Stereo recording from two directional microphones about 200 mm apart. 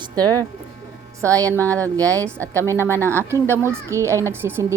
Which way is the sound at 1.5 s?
10° left (ahead or behind).